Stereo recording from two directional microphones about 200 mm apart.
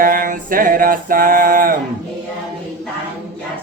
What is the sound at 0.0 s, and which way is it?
Mantra, 45° right (ahead or behind).